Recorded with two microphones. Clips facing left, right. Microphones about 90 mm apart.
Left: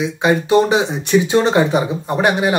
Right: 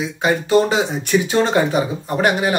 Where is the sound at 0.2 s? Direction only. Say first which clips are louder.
Left 2 dB; 20° left (ahead or behind).